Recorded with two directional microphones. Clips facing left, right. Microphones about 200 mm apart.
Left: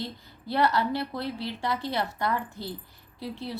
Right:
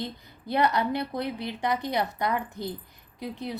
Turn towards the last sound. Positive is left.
turn(degrees=-15)  # may be behind; listen again after turning